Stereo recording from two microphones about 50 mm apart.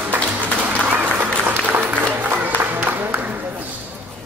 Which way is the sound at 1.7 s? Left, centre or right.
Right.